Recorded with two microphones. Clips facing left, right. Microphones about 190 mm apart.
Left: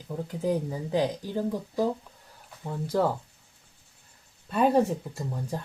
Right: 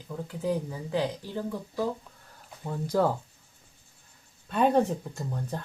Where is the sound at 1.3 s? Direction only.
15° left (ahead or behind).